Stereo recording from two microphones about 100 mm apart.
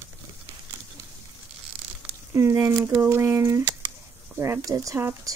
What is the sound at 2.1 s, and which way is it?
Speech, 25° right (ahead or behind).